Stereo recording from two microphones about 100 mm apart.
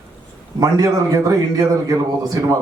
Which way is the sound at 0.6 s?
40° right (ahead or behind).